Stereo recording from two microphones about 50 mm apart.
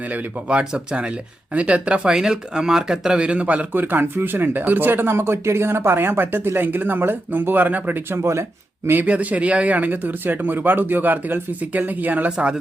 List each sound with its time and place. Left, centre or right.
0.1 s speech: right
2.1 s speech: centre
3.7 s speech: right
8.1 s speech: right
9.0 s speech: right